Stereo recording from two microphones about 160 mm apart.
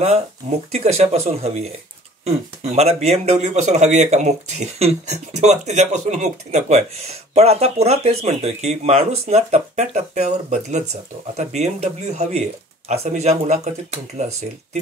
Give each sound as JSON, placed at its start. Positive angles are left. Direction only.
{"t": 0.7, "sound": "speech", "side_deg": -40}